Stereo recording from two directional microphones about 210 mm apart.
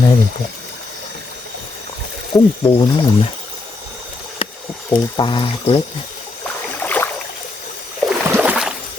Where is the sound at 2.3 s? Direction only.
15° left (ahead or behind).